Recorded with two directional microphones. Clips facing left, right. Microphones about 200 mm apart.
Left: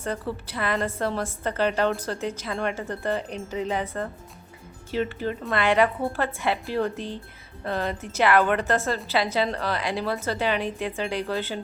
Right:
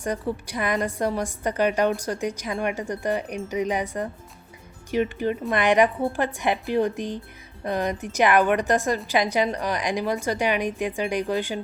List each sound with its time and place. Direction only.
0.0 s a woman's voice: 15° right (ahead or behind)